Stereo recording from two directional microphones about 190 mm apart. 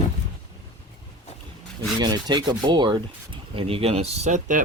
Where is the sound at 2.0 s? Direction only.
20° right (ahead or behind).